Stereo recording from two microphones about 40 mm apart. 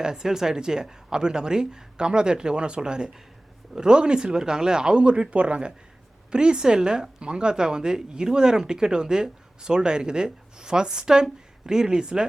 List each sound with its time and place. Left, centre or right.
0.0 s a woman's voice: centre